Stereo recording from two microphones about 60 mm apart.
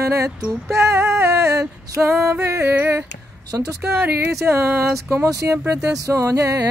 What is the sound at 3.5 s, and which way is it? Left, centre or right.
Speech, right.